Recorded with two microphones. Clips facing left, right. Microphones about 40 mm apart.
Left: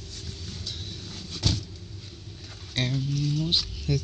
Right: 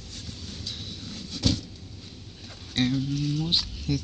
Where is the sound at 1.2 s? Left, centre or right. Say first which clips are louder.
Right 2 dB; left.